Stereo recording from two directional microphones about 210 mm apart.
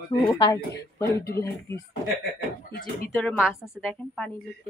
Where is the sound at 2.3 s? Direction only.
45° left (ahead or behind).